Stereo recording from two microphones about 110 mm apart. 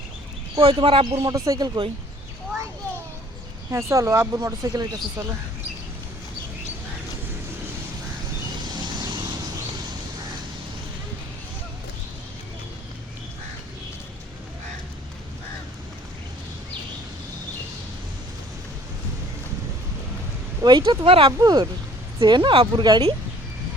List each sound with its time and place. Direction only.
0.6 s speech: 50° right (ahead or behind)
1.1 s speech: 35° right (ahead or behind)
3.7 s speech: 25° right (ahead or behind)
8.6 s vehicle: 40° right (ahead or behind)
20.6 s speech: 40° right (ahead or behind)
21.3 s speech: 35° right (ahead or behind)